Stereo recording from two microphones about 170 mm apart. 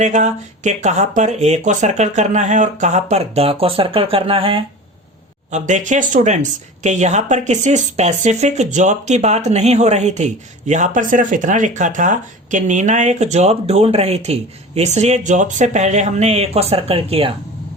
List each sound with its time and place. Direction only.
0.0 s speech: 45° right (ahead or behind)
5.5 s speech: 45° right (ahead or behind)